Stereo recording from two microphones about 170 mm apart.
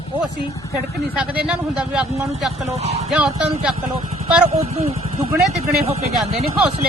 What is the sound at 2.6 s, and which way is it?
Speech, 40° right (ahead or behind).